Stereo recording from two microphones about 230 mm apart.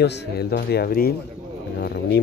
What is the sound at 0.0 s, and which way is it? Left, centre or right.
Speech, left.